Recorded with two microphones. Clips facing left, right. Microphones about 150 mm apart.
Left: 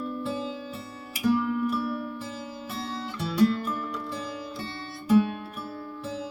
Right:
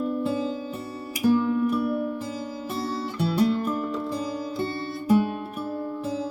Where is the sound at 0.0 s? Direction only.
35° right (ahead or behind).